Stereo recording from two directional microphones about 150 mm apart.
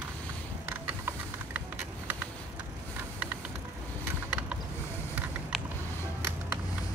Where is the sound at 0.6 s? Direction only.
15° right (ahead or behind).